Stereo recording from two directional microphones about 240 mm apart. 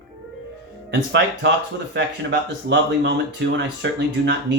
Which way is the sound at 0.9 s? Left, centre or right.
Right.